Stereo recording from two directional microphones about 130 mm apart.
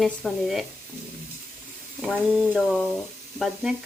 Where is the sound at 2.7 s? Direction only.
5° left (ahead or behind).